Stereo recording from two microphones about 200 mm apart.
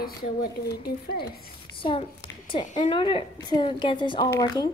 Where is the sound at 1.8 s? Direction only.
25° left (ahead or behind).